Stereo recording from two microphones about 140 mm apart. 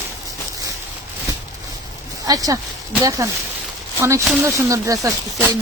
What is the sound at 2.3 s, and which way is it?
Speech, 25° right (ahead or behind).